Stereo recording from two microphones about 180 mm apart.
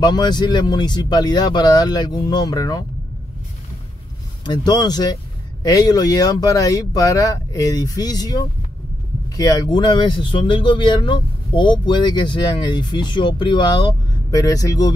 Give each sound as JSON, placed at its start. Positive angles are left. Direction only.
{"t": 0.0, "sound": "speech", "side_deg": 25}
{"t": 4.5, "sound": "speech", "side_deg": 20}